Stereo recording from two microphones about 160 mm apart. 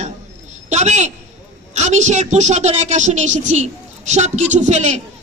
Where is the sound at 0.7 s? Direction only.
45° right (ahead or behind).